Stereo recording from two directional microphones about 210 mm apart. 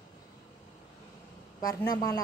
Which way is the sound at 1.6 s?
15° left (ahead or behind).